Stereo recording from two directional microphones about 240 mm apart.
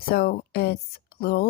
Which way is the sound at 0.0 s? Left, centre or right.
Left.